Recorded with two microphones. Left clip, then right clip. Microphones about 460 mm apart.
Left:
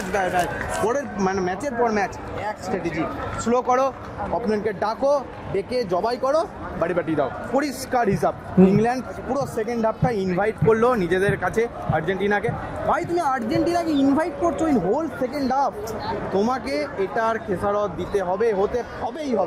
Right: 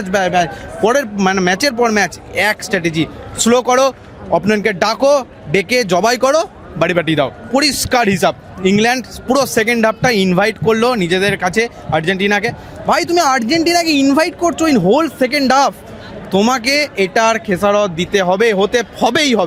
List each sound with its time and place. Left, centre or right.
0.9 s a man's voice: right